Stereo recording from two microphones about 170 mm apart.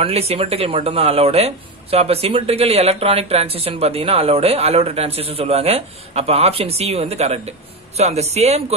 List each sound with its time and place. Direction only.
0.0 s speech: 35° right (ahead or behind)